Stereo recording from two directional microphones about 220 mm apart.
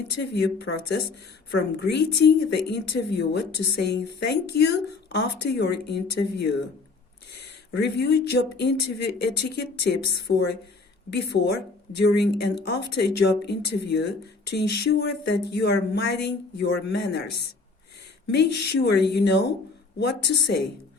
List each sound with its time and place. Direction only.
0.2 s a woman's voice: 50° left (ahead or behind)
7.8 s a woman's voice: 50° left (ahead or behind)